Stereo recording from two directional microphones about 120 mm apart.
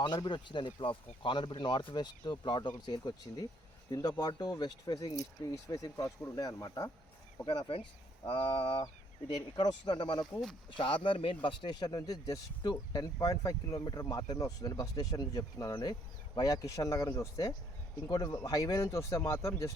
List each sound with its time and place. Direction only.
0.0 s speech: 40° left (ahead or behind)
7.4 s speech: 45° left (ahead or behind)
9.3 s speech: 35° left (ahead or behind)